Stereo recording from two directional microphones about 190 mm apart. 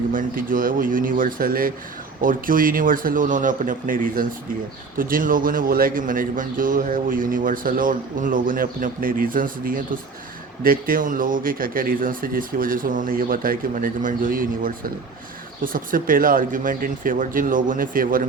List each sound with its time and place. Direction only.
0.1 s a man's voice: 45° right (ahead or behind)